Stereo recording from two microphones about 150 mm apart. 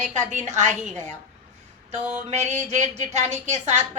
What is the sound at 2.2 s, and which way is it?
Speech, 50° right (ahead or behind).